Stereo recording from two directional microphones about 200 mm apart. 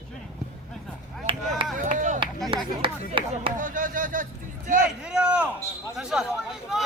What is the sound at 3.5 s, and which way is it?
Speech, 40° right (ahead or behind).